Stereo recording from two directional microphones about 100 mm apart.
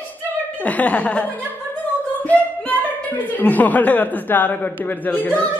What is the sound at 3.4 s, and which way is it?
Speech, 15° left (ahead or behind).